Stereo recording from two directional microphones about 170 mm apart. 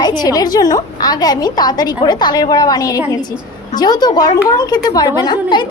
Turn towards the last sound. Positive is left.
turn(degrees=25)  # may be behind; listen again after turning